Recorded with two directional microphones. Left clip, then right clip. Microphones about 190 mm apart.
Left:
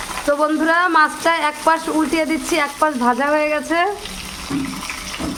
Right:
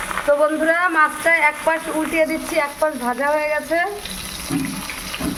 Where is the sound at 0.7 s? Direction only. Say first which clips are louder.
Left 5 dB; 40° left (ahead or behind).